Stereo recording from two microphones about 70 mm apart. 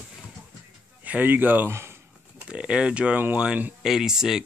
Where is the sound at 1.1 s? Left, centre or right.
Right.